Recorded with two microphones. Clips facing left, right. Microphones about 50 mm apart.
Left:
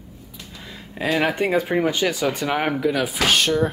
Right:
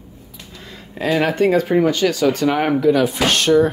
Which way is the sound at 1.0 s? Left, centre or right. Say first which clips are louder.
Right 4 dB; centre.